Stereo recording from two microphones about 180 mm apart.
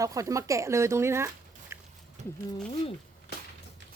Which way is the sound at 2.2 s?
40° right (ahead or behind).